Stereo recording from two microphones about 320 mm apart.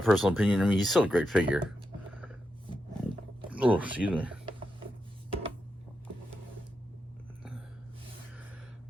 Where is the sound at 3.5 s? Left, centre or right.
Centre.